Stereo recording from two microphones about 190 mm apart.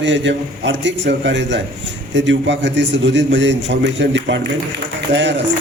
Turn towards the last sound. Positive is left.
turn(degrees=-70)  # may be behind; listen again after turning